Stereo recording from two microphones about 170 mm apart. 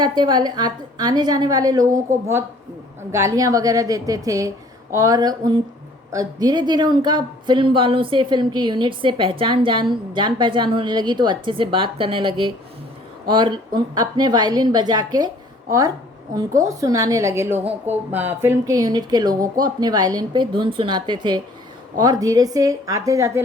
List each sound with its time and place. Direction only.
0.0 s speech: 25° right (ahead or behind)
3.1 s speech: 20° right (ahead or behind)
16.3 s speech: 20° right (ahead or behind)